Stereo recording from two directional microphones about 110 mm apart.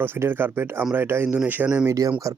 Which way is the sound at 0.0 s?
20° right (ahead or behind).